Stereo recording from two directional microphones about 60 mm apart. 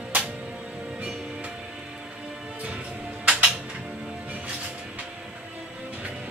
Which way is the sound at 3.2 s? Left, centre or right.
Centre.